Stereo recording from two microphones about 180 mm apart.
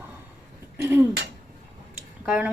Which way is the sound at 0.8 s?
10° right (ahead or behind).